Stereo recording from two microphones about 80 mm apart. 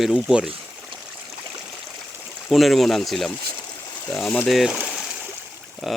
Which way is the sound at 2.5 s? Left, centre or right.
Centre.